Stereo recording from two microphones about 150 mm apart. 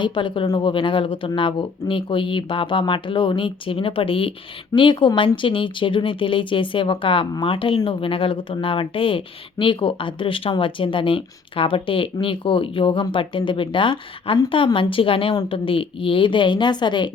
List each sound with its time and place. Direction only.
0.0 s speech: 30° left (ahead or behind)